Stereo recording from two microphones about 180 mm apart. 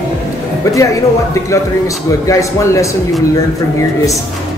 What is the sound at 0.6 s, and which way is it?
A man's voice, 20° left (ahead or behind).